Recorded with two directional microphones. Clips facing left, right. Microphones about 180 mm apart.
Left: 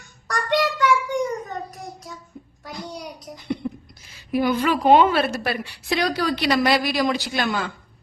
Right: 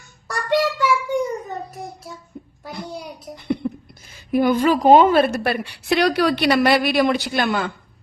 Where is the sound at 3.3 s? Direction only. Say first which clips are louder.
Right 4 dB; 55° right (ahead or behind).